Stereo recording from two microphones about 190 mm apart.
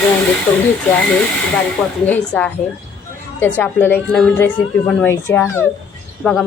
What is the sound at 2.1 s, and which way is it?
A woman's voice, 5° left (ahead or behind).